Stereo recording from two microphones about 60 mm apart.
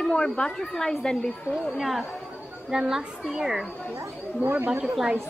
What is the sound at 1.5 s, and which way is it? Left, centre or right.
A woman's voice, centre.